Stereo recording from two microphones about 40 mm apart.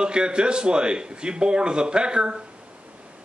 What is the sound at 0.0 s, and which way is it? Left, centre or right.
A man's voice, right.